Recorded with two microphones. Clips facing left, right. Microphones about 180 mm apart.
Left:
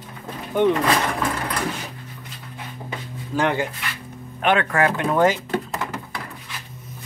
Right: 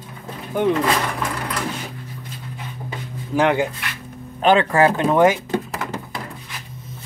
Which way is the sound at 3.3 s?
15° right (ahead or behind).